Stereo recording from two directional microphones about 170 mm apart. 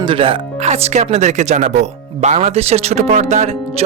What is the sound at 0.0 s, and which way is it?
Speech, 30° right (ahead or behind).